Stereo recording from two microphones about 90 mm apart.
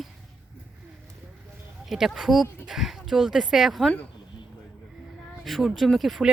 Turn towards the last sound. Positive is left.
turn(degrees=0)  # may be behind; listen again after turning